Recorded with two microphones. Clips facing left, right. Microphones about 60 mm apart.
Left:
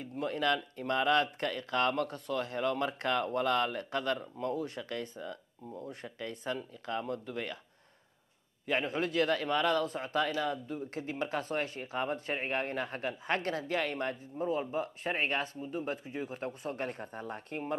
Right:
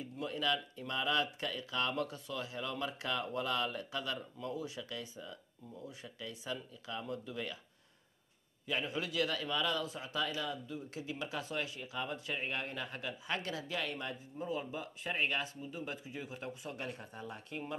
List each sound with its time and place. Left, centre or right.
0.0 s speech: left
8.6 s speech: left